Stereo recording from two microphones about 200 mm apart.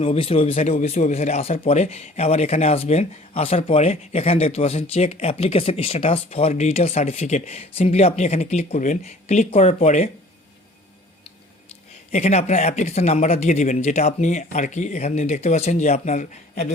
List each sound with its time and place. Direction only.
0.0 s speech: 30° left (ahead or behind)
12.1 s speech: 30° left (ahead or behind)